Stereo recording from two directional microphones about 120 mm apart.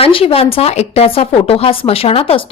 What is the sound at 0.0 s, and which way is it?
A woman's voice, 50° left (ahead or behind).